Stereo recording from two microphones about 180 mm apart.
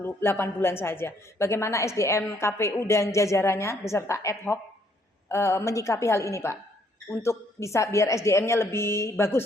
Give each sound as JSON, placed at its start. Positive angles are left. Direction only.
{"t": 0.0, "sound": "a woman's voice", "side_deg": 10}